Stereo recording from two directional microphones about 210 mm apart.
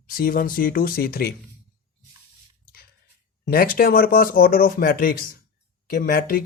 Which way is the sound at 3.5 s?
45° left (ahead or behind).